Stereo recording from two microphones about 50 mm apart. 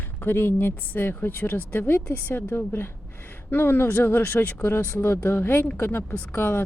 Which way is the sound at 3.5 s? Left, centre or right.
Left.